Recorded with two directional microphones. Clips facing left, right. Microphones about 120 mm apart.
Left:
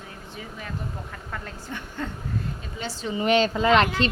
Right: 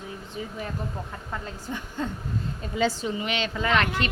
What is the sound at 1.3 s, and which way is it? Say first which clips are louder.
Speech: right 2 dB; 15° right (ahead or behind).